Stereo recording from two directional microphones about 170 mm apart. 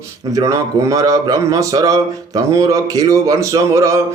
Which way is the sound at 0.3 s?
20° right (ahead or behind).